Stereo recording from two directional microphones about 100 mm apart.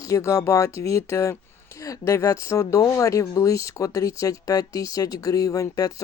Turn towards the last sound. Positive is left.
turn(degrees=35)  # may be behind; listen again after turning